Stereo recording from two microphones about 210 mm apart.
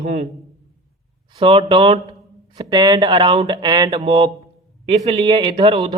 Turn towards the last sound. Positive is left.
turn(degrees=-25)  # may be behind; listen again after turning